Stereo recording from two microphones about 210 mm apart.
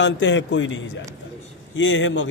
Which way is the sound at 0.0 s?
60° left (ahead or behind).